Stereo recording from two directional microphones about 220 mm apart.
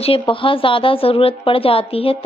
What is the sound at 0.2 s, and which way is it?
A woman's voice, 25° left (ahead or behind).